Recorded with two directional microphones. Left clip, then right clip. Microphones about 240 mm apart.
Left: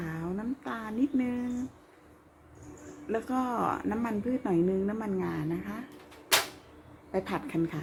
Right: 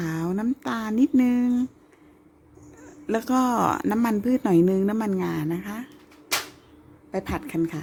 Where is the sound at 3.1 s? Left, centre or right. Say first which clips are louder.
Right 8 dB; right.